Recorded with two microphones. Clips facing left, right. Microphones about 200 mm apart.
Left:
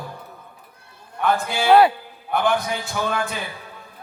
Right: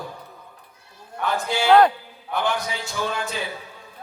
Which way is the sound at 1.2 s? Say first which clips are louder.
Left 3 dB; 55° left (ahead or behind).